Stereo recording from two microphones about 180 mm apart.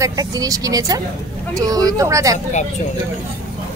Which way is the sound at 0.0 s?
20° right (ahead or behind).